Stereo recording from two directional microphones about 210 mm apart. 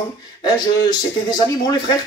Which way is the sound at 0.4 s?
20° left (ahead or behind).